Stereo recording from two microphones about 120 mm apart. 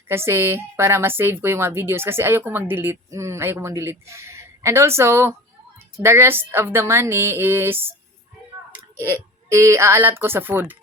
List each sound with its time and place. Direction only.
0.1 s speech: 20° right (ahead or behind)